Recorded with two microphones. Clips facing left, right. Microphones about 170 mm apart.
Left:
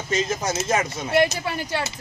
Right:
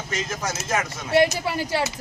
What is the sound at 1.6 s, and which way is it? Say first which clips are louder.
Speech: right 4 dB; 35° right (ahead or behind).